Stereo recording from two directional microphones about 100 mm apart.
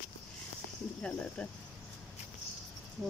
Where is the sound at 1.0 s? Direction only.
10° left (ahead or behind).